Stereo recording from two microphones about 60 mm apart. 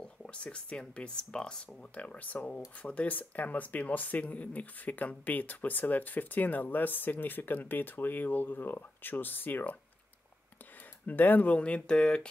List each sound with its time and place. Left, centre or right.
0.0 s speech: centre; by 9.8 s left
11.1 s speech: left